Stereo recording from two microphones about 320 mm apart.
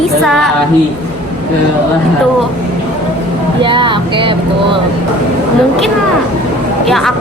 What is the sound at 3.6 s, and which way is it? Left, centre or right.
A woman's voice, centre.